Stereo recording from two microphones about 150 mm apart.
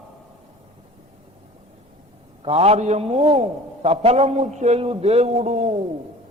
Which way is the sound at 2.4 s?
40° right (ahead or behind).